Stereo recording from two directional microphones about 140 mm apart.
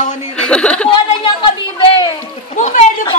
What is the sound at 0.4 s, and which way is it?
Chuckle, 5° left (ahead or behind).